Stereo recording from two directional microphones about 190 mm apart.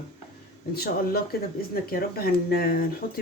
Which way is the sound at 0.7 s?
55° left (ahead or behind).